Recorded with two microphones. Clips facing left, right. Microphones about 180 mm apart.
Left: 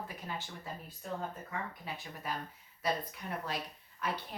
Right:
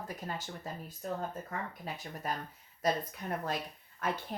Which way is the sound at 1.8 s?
40° right (ahead or behind).